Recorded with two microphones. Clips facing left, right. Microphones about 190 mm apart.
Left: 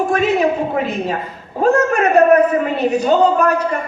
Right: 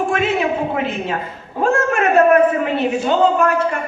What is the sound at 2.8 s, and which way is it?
Speech, 40° left (ahead or behind).